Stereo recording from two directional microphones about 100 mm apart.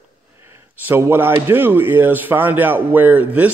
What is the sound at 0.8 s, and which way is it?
A man's voice, 25° right (ahead or behind).